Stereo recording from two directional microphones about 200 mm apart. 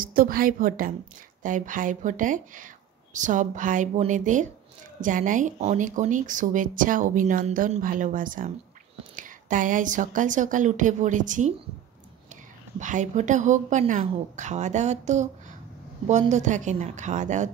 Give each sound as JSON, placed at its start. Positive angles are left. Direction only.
{"t": 0.0, "sound": "a woman's voice", "side_deg": -45}
{"t": 12.7, "sound": "speech", "side_deg": -40}